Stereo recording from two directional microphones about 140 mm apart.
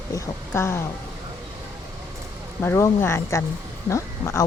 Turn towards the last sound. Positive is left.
turn(degrees=20)  # may be behind; listen again after turning